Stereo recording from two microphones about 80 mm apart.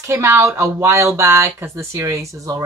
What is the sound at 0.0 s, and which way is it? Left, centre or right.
Speech, right.